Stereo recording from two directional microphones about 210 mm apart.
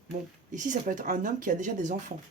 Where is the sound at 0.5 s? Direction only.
35° right (ahead or behind).